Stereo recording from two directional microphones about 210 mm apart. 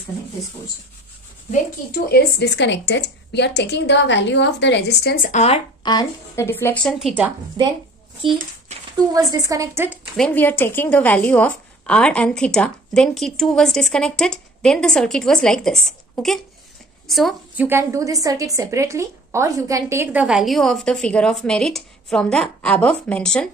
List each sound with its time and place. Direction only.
2.0 s a woman's voice: 50° left (ahead or behind); by 7.3 s 5° right (ahead or behind)
7.6 s speech: 20° right (ahead or behind)
9.1 s a woman's voice: 15° right (ahead or behind)
10.1 s a woman's voice: 5° left (ahead or behind)
17.6 s a woman's voice: 15° right (ahead or behind); by 23.5 s 5° left (ahead or behind)